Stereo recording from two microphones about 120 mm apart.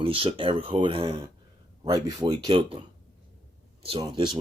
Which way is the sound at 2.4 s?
45° right (ahead or behind).